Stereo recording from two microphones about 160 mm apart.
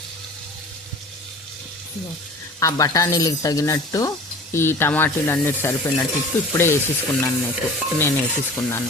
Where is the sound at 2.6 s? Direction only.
20° left (ahead or behind).